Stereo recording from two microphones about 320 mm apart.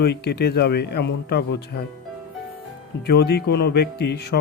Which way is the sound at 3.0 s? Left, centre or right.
Left.